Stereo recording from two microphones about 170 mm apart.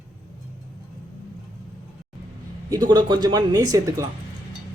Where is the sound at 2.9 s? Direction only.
25° right (ahead or behind).